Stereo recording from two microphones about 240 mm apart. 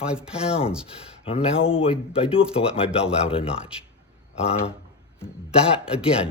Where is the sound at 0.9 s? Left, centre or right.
Left.